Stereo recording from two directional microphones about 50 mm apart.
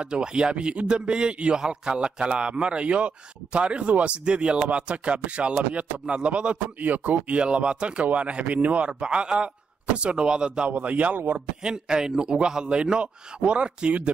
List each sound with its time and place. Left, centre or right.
0.0 s a man's voice: centre
10.7 s a man's voice: right
11.6 s a man's voice: centre